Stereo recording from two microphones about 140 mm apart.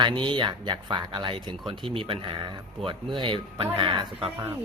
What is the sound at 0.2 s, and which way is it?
Speech, 35° right (ahead or behind).